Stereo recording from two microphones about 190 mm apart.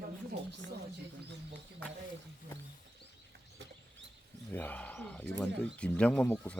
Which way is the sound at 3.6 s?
70° right (ahead or behind).